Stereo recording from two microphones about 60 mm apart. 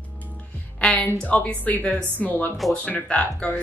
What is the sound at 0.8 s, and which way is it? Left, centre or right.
Speech, left.